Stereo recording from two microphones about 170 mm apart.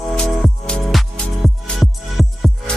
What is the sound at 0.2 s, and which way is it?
Music, 5° left (ahead or behind).